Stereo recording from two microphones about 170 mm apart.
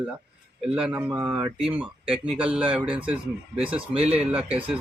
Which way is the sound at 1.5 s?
5° right (ahead or behind).